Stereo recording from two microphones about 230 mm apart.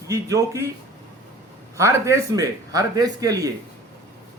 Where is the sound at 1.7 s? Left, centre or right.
Centre.